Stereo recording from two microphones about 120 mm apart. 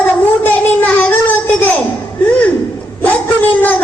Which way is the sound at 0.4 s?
15° left (ahead or behind).